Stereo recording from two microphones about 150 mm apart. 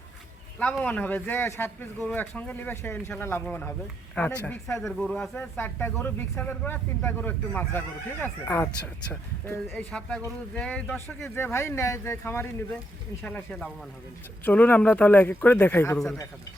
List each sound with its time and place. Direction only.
0.6 s speech: 10° left (ahead or behind)
9.7 s speech: 5° left (ahead or behind)